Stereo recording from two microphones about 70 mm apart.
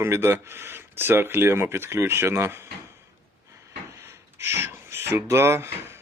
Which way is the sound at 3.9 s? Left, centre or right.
Right.